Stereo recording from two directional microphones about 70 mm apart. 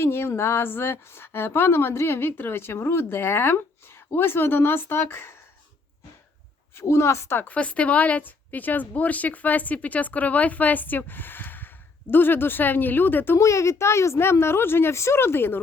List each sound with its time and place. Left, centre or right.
0.0 s a woman's voice: left
6.7 s a woman's voice: left
13.4 s a woman's voice: left